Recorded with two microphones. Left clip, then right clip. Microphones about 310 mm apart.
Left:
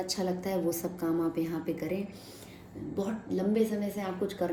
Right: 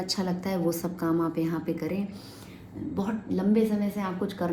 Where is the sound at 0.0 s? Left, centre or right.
Right.